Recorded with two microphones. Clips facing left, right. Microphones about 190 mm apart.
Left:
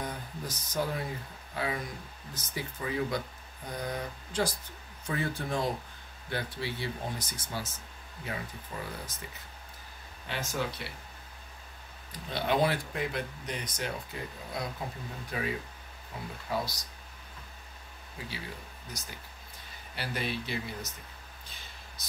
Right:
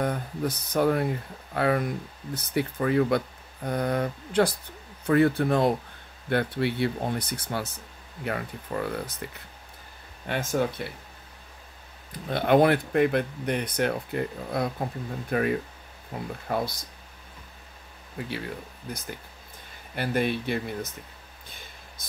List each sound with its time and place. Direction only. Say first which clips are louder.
0.0 s speech: right 10 dB; 60° right (ahead or behind)
12.3 s speech: right 8 dB; 55° right (ahead or behind)
18.2 s speech: right 9 dB; 60° right (ahead or behind)